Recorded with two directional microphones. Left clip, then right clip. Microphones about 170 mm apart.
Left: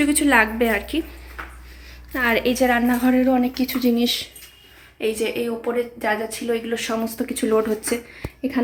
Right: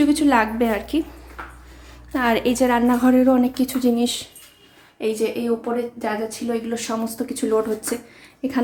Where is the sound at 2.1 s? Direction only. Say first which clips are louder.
Even; 15° right (ahead or behind); by 7.9 s 15° left (ahead or behind).